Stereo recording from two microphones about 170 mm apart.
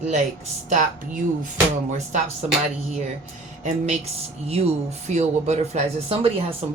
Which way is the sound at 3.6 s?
45° right (ahead or behind).